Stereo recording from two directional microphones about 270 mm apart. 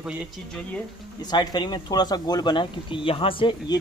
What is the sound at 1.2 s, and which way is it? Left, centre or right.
Speech, centre.